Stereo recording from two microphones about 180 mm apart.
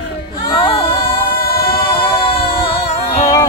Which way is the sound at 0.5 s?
25° left (ahead or behind).